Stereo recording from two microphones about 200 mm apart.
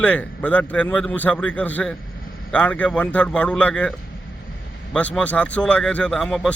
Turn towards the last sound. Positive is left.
turn(degrees=5)  # may be behind; listen again after turning